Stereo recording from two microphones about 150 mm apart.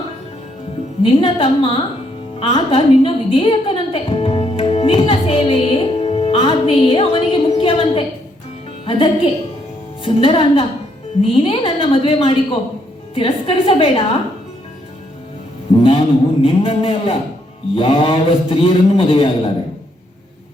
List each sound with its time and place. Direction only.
1.0 s a man's voice: 40° left (ahead or behind)
2.4 s a sound: 35° left (ahead or behind)
8.9 s a man's voice: 40° left (ahead or behind)
15.7 s a man's voice: 40° left (ahead or behind)